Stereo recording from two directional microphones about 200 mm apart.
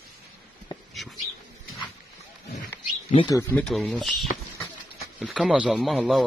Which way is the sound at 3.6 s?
Centre (ahead or behind).